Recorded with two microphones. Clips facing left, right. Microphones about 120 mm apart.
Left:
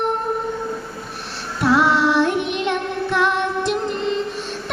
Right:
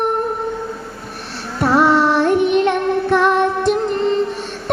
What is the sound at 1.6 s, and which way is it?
Child singing, 45° right (ahead or behind).